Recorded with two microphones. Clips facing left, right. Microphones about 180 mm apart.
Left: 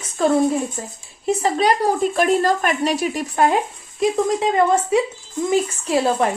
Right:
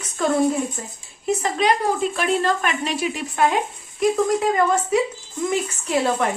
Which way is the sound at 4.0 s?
25° left (ahead or behind).